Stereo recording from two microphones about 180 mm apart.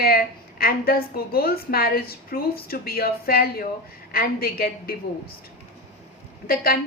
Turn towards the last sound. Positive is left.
turn(degrees=55)  # may be behind; listen again after turning